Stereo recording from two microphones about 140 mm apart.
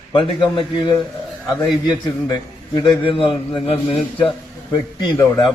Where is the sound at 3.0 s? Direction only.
40° left (ahead or behind).